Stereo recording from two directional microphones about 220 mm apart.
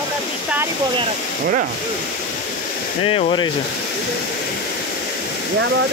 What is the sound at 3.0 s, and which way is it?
Speech, 25° left (ahead or behind).